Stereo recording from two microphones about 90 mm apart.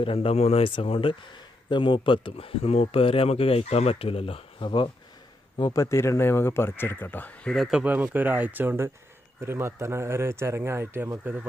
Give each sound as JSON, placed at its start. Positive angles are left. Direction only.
{"t": 0.0, "sound": "speech", "side_deg": 90}
{"t": 1.7, "sound": "speech", "side_deg": 70}
{"t": 5.5, "sound": "speech", "side_deg": 40}
{"t": 7.7, "sound": "speech", "side_deg": -15}